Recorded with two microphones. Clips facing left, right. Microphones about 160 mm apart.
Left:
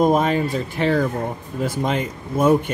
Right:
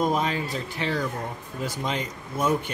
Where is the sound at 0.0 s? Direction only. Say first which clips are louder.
Left 8 dB; 50° left (ahead or behind).